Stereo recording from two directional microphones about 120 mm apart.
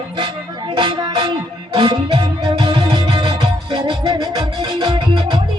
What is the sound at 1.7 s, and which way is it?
Music, 45° right (ahead or behind).